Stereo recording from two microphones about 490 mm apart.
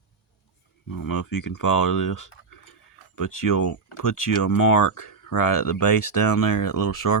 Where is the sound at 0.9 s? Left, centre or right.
Left.